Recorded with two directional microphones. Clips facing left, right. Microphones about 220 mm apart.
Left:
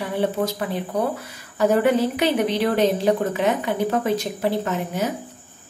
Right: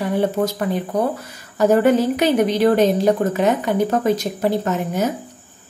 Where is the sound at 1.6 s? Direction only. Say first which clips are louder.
Right 3 dB; 45° right (ahead or behind).